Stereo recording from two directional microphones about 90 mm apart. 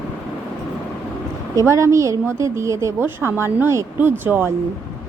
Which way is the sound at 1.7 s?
35° right (ahead or behind).